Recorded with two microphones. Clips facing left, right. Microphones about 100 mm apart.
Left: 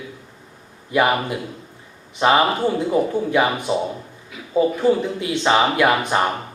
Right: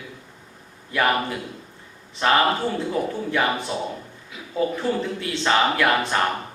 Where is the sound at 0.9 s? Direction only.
15° left (ahead or behind).